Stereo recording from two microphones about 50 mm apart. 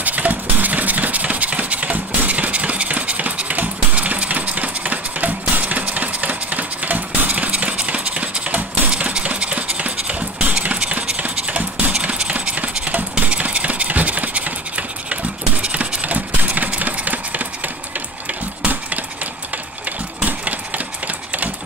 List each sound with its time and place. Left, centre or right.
0.0 s engine: right
20.2 s engine: right